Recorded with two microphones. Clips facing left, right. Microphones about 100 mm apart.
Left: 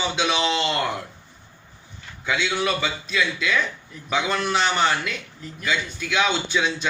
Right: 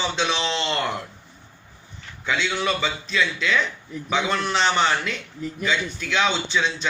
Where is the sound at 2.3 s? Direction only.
5° left (ahead or behind).